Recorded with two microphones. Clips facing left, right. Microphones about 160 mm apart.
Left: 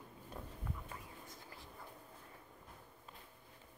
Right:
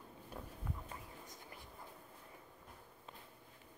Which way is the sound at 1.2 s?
20° right (ahead or behind).